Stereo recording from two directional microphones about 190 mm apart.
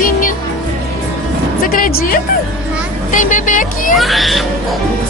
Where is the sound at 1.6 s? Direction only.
50° left (ahead or behind).